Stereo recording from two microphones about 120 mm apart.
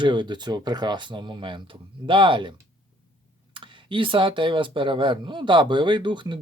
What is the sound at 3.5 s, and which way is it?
Speech, 45° right (ahead or behind).